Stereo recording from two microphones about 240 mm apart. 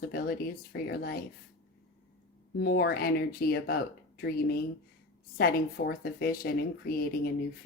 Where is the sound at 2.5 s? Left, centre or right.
Left.